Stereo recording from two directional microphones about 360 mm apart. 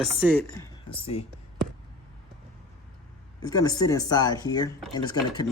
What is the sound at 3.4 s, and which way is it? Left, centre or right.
Speech, centre.